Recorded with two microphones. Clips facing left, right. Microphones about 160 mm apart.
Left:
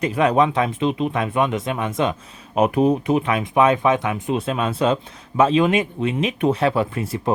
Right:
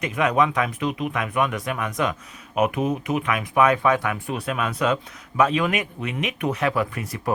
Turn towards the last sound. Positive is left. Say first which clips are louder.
# left 4 dB
turn(degrees=25)  # may be behind; listen again after turning